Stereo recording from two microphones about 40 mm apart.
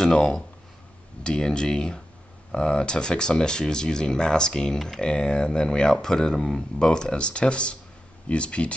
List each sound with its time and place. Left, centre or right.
0.0 s speech: left